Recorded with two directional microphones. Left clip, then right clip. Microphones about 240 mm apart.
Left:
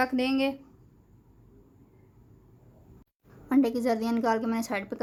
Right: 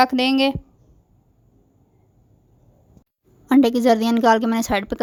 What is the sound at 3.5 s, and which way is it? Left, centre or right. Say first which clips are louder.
A woman's voice: right 10 dB; right.